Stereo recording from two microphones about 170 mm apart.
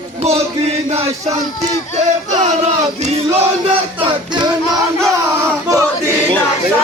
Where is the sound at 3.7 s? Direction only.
30° right (ahead or behind).